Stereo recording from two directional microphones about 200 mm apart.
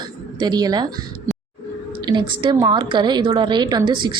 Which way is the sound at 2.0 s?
20° right (ahead or behind).